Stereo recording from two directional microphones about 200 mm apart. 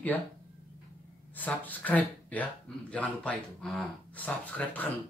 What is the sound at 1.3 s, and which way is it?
Speech, 10° left (ahead or behind).